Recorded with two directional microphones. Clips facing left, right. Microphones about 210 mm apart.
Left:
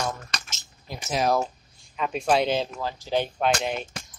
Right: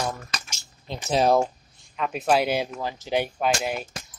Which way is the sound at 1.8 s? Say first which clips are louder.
Even; centre (ahead or behind).